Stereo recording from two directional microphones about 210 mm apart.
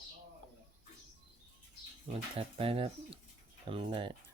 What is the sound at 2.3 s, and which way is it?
Speech, 25° right (ahead or behind).